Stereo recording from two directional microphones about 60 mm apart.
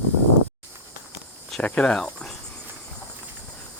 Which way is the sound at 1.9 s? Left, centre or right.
Centre.